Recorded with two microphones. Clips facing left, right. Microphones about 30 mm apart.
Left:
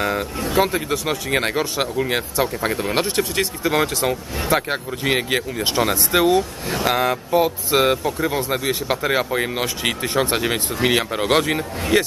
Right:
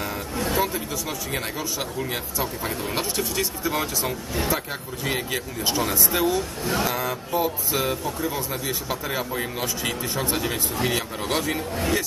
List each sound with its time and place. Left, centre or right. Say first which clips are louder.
0.6 s speech: left 11 dB; left